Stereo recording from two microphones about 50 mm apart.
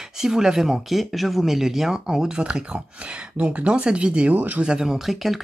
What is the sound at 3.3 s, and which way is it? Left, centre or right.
Speech, right.